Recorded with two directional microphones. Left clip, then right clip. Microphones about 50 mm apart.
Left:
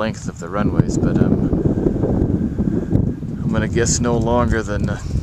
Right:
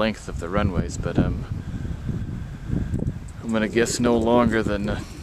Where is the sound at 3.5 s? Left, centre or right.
Left.